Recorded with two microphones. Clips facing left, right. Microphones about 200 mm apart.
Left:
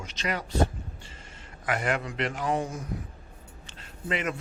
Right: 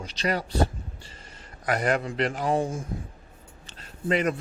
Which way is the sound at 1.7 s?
40° right (ahead or behind).